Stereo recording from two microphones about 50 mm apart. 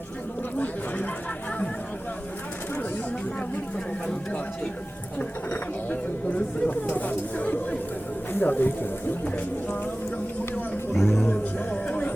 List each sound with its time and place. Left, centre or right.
4.0 s a sound: left
8.3 s speech: left
10.9 s music: centre
11.2 s music: left